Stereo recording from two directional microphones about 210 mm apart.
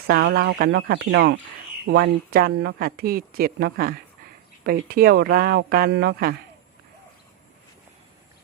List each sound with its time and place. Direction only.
0.1 s speech: 50° right (ahead or behind)